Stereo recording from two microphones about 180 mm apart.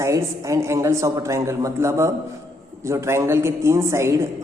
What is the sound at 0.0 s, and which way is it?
A man's voice, 15° right (ahead or behind).